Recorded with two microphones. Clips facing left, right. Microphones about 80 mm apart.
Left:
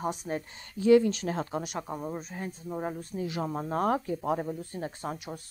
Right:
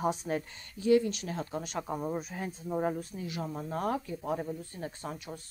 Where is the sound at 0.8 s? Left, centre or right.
Left.